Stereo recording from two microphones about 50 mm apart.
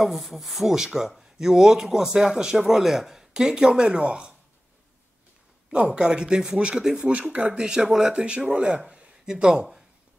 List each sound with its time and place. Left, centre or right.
0.0 s a man's voice: centre
5.9 s a man's voice: centre
7.0 s speech: right
7.5 s a man's voice: centre
8.1 s a man's voice: right